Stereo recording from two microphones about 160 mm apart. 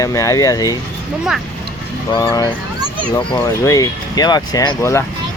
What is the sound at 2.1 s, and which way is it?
Speech, 25° left (ahead or behind).